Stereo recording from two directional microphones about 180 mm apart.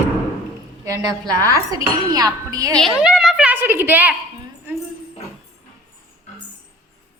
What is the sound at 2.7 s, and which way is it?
A woman's voice, centre (ahead or behind).